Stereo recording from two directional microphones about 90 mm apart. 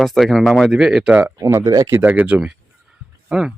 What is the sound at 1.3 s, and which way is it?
Speech, 35° right (ahead or behind).